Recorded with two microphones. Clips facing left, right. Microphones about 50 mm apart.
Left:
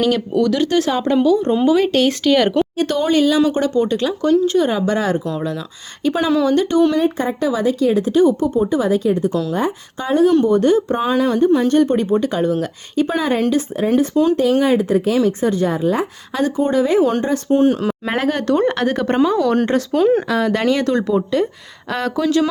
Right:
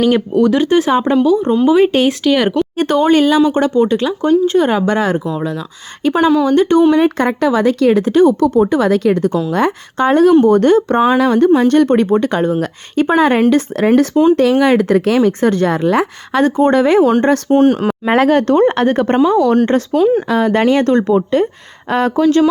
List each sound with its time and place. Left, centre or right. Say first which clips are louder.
0.0 s speech: right 4 dB; right; by 2.5 s centre
2.7 s speech: right 5 dB; right
5.2 s speech: right 3 dB; centre
6.4 s speech: right 4 dB; right
7.0 s speech: right 5 dB; right
13.5 s speech: right 5 dB; right
16.4 s speech: right 5 dB; right
17.5 s speech: right 1 dB; right
18.2 s speech: right 9 dB; right
18.4 s speech: right 5 dB; right
19.2 s speech: right 4 dB; centre
20.2 s speech: right 4 dB; centre
20.7 s speech: right 5 dB; right
21.8 s speech: right 6 dB; right